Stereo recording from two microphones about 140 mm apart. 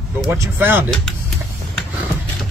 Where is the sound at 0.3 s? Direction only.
15° right (ahead or behind).